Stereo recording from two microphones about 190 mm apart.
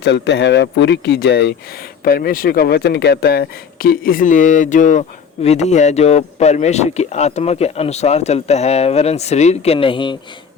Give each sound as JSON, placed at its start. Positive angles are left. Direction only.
{"t": 0.0, "sound": "speech", "side_deg": 60}